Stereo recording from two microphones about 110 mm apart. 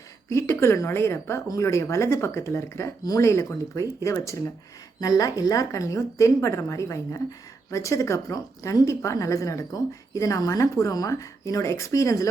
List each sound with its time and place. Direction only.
0.3 s speech: 25° left (ahead or behind)